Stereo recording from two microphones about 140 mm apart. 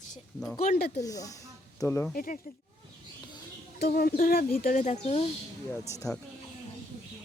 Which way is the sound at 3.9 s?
80° left.